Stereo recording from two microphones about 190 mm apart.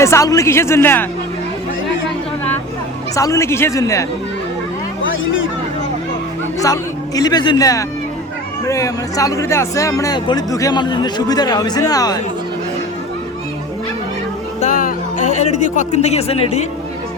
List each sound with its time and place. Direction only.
0.0 s speech: 15° left (ahead or behind)
3.2 s speech: 15° left (ahead or behind)
5.0 s a sound: 90° left
6.6 s speech: 20° left (ahead or behind)
14.6 s speech: 45° left (ahead or behind)